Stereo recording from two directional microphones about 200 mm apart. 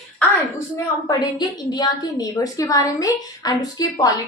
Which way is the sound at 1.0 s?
20° left (ahead or behind).